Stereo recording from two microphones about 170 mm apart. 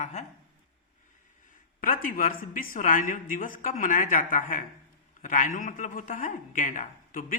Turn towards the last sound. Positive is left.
turn(degrees=50)  # may be behind; listen again after turning